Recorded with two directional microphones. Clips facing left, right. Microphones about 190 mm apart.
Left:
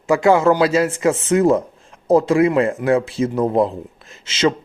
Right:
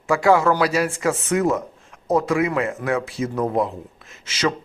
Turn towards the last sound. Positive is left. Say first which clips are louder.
# left 5 dB
turn(degrees=25)  # may be behind; listen again after turning